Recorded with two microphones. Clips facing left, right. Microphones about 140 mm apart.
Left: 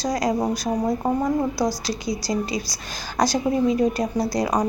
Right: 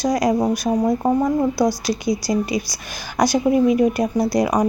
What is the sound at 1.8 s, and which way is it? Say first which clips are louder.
A woman's voice: right 5 dB; 15° right (ahead or behind).